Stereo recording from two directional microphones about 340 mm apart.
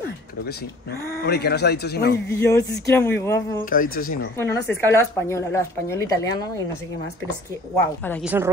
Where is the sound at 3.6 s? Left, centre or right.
Left.